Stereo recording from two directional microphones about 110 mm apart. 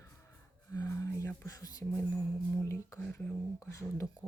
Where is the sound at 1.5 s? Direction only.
30° left (ahead or behind).